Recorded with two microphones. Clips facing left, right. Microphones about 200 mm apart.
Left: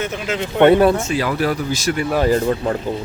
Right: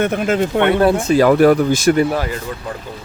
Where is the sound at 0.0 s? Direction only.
55° right (ahead or behind).